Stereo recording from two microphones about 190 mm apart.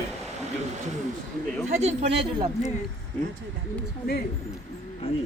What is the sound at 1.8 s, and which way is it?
Speech, 35° right (ahead or behind).